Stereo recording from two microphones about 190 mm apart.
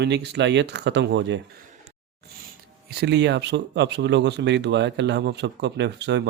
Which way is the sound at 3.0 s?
65° right (ahead or behind).